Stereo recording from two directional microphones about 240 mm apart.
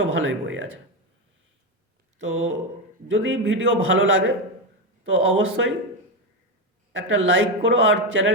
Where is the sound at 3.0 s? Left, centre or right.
Right.